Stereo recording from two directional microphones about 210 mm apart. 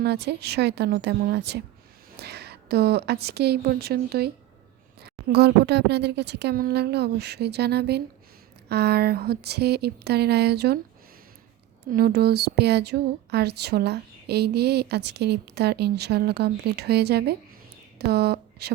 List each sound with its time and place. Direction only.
0.0 s a woman's voice: 55° right (ahead or behind)
11.9 s speech: 50° right (ahead or behind)